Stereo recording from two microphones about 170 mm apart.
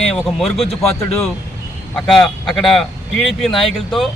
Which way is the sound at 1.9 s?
Centre (ahead or behind).